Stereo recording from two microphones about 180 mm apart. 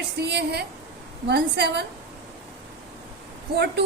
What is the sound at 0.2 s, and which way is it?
A woman's voice, 65° right (ahead or behind).